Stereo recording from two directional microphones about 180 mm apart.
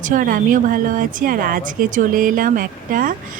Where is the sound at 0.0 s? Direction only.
50° right (ahead or behind).